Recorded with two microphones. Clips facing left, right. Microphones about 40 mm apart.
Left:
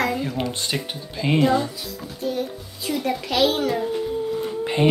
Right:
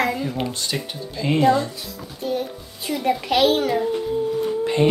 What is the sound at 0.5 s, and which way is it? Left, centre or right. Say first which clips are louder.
Speech: even; left.